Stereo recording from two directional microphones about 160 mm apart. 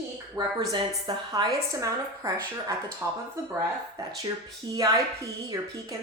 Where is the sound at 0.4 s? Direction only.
25° right (ahead or behind).